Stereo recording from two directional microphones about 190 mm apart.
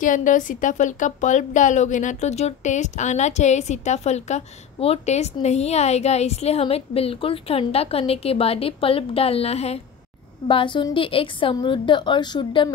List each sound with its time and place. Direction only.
0.0 s a woman's voice: 45° left (ahead or behind); by 12.6 s 25° left (ahead or behind)